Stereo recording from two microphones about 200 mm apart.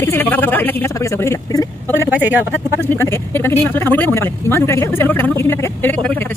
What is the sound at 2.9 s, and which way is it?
A man's voice, 10° left (ahead or behind).